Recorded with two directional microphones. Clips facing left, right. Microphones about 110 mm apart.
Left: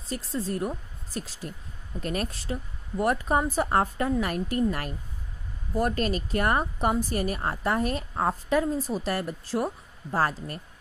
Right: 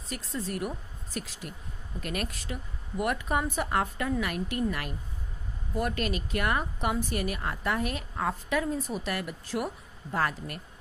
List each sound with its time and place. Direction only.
0.1 s a woman's voice: 30° left (ahead or behind)